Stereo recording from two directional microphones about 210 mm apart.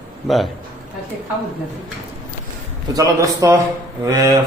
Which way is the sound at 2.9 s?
15° right (ahead or behind).